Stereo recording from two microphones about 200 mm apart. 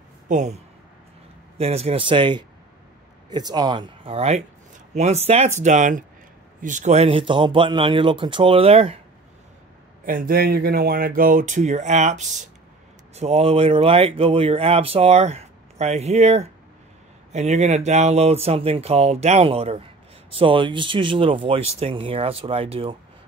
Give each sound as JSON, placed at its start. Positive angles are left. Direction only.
{"t": 0.3, "sound": "speech", "side_deg": -35}
{"t": 1.6, "sound": "speech", "side_deg": -30}
{"t": 10.0, "sound": "speech", "side_deg": -45}